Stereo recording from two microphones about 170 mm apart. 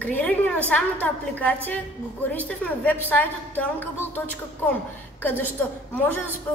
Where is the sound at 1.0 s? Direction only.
10° left (ahead or behind).